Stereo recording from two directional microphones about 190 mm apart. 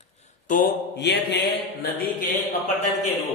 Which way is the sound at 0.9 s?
60° left (ahead or behind).